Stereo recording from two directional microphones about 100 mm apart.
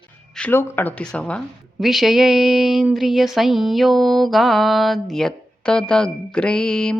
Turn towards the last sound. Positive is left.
turn(degrees=10)  # may be behind; listen again after turning